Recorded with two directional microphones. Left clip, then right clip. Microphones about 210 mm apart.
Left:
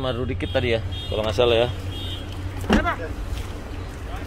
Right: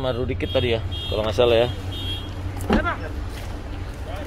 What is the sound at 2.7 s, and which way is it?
Speech, 50° left (ahead or behind).